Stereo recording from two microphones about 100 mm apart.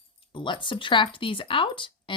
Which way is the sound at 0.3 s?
55° left (ahead or behind).